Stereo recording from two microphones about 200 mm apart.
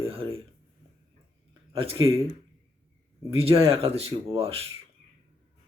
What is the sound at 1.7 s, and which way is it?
Speech, 30° right (ahead or behind).